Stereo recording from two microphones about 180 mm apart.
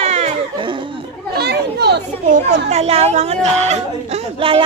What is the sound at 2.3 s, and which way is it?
Speech, 40° right (ahead or behind).